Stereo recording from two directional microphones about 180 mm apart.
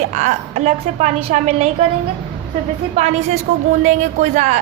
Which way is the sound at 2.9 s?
35° right (ahead or behind).